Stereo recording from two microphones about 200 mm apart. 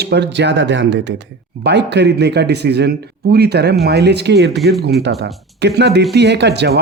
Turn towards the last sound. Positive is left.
turn(degrees=-55)  # may be behind; listen again after turning